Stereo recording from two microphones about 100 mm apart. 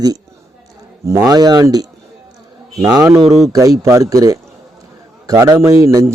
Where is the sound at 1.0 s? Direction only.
35° right (ahead or behind).